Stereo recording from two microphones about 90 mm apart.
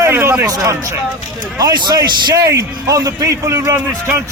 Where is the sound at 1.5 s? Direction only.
50° right (ahead or behind).